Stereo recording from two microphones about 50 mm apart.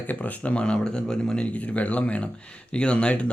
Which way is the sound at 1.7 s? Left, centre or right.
Left.